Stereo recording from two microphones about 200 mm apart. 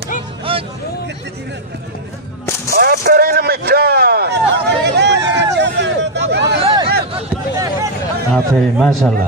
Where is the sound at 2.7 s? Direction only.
45° right (ahead or behind).